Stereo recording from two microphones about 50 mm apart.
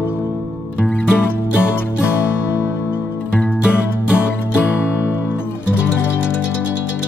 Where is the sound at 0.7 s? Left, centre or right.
Left.